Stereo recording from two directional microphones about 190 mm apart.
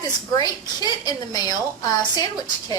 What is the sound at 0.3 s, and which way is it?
A woman's voice, 20° left (ahead or behind).